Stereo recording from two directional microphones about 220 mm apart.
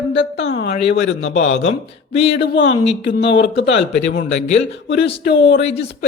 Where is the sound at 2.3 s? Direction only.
55° left (ahead or behind).